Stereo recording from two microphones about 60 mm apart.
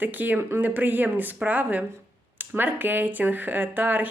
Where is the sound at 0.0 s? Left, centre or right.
Right.